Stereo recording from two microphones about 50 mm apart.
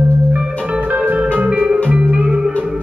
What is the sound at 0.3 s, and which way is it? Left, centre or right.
Music, right.